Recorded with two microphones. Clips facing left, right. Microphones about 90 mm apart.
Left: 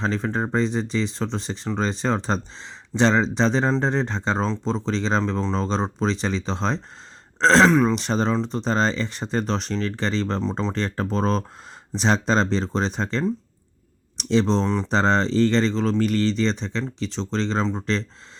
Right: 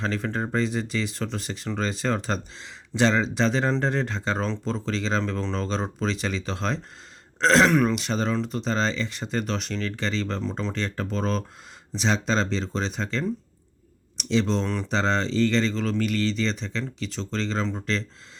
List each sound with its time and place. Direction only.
0.0 s speech: 25° left (ahead or behind)
7.7 s speech: 20° left (ahead or behind)
7.9 s speech: 35° left (ahead or behind)